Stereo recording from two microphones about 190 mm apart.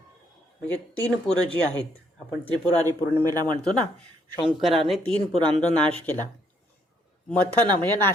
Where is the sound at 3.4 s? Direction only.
5° left (ahead or behind).